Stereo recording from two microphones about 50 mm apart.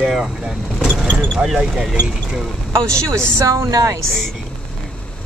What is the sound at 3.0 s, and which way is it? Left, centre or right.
Speech, right.